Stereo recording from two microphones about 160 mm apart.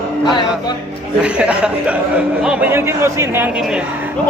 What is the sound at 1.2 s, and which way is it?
A man's voice, 10° right (ahead or behind).